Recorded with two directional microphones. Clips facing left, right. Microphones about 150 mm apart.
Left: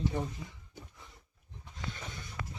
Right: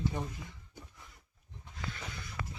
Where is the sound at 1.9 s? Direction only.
40° left (ahead or behind).